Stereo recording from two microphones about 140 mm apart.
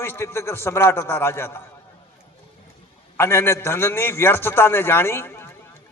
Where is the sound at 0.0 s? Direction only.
15° left (ahead or behind).